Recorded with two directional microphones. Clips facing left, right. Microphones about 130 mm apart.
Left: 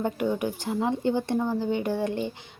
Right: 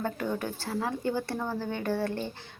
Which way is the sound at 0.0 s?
15° left (ahead or behind).